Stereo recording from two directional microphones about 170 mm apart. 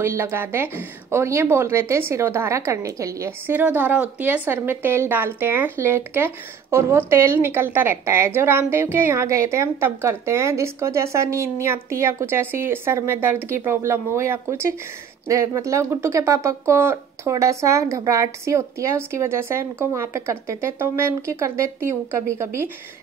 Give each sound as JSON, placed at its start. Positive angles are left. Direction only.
{"t": 0.0, "sound": "a woman's voice", "side_deg": -15}